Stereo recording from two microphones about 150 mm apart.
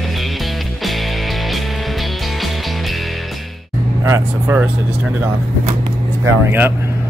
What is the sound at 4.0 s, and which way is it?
Vehicle, 15° right (ahead or behind).